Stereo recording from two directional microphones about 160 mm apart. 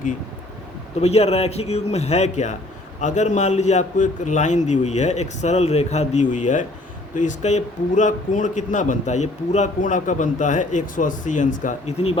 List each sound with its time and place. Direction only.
1.0 s a man's voice: 40° left (ahead or behind)